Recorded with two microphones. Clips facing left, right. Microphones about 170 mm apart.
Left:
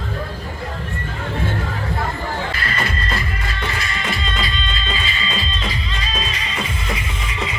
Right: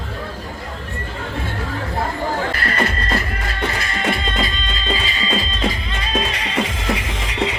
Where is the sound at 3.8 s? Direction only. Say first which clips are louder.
Right 4 dB; 45° right (ahead or behind); by 7.5 s 70° right (ahead or behind).